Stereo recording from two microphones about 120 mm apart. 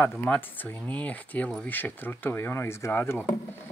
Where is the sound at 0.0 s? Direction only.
15° left (ahead or behind).